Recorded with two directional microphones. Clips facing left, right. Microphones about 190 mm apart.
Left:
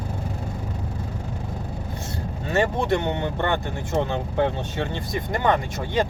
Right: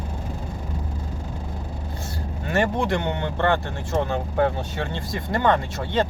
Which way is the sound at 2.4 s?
20° left (ahead or behind).